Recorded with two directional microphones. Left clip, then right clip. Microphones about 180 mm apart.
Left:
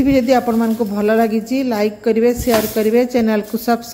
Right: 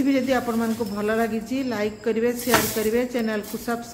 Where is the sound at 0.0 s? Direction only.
30° left (ahead or behind).